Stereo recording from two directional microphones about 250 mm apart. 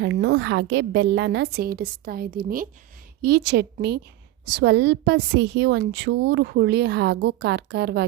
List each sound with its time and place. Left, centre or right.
0.0 s a woman's voice: right